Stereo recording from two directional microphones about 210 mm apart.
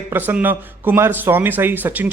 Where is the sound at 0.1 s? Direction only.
10° right (ahead or behind).